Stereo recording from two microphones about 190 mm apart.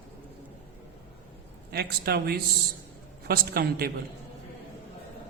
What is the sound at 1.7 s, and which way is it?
A man's voice, 55° right (ahead or behind).